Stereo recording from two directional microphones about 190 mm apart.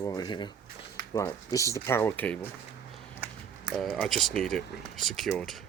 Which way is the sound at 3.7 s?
Centre (ahead or behind).